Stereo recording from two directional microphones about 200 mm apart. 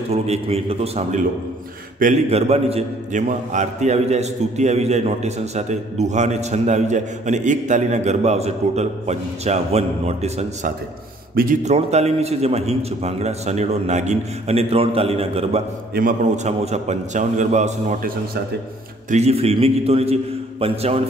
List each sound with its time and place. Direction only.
0.1 s a man's voice: 30° right (ahead or behind)
15.9 s a man's voice: 45° right (ahead or behind)